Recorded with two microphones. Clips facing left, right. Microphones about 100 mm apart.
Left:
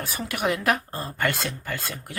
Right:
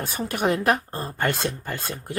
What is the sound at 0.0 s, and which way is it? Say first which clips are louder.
A woman's voice: right 2 dB; 30° right (ahead or behind).